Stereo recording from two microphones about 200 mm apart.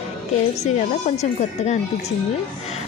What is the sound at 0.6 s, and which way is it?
A woman's voice, 35° left (ahead or behind).